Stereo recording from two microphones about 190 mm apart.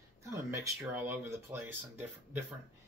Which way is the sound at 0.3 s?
10° right (ahead or behind).